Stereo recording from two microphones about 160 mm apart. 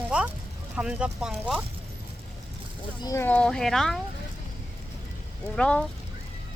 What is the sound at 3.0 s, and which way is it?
Speech, 20° left (ahead or behind).